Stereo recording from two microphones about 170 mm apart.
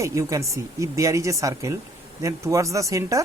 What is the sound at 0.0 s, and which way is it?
Speech, 15° right (ahead or behind).